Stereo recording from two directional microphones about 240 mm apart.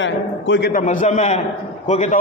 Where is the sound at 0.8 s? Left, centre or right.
Left.